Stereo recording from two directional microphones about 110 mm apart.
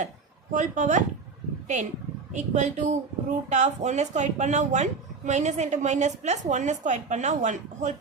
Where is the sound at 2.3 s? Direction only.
90° right.